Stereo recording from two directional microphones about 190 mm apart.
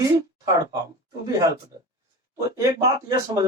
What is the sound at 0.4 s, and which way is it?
Speech, 20° right (ahead or behind).